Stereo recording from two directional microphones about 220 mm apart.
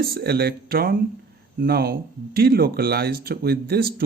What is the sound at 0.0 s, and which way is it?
Speech, 45° right (ahead or behind).